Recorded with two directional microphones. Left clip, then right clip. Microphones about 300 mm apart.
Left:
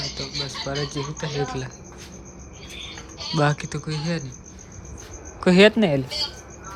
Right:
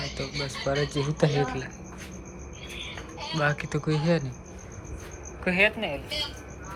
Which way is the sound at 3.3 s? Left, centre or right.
Centre.